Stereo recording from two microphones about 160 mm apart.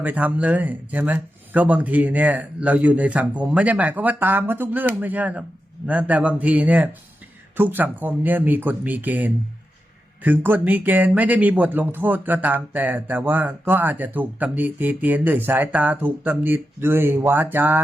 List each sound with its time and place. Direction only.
0.0 s speech: 10° right (ahead or behind)